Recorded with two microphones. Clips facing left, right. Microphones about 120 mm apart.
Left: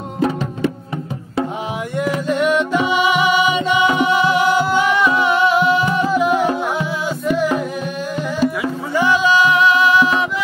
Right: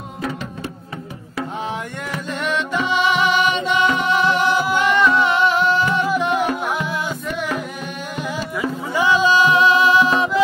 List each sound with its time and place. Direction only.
2.0 s music: 10° left (ahead or behind)
9.2 s music: 30° right (ahead or behind)